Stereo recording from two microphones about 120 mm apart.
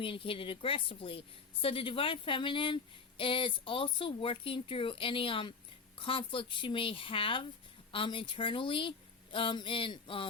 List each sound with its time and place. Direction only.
0.0 s speech: 50° left (ahead or behind)